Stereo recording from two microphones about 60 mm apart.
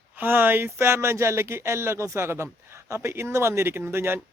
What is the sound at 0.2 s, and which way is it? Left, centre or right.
Speech, right.